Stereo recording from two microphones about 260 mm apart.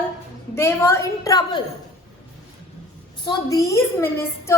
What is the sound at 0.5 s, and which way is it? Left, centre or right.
Speech, centre.